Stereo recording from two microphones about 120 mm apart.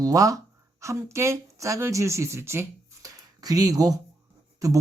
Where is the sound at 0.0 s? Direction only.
30° right (ahead or behind).